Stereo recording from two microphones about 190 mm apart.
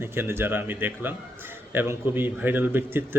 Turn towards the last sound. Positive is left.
turn(degrees=-10)  # may be behind; listen again after turning